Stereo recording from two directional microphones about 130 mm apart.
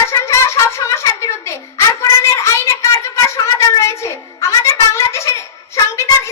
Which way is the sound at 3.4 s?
25° left (ahead or behind).